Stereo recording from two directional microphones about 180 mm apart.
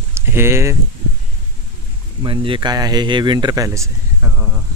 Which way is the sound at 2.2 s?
30° right (ahead or behind).